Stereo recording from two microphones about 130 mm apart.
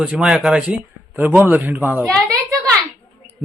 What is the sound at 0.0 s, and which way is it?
Speech, 5° right (ahead or behind).